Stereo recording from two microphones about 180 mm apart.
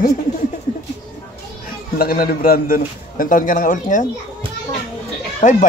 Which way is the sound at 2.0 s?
55° left (ahead or behind).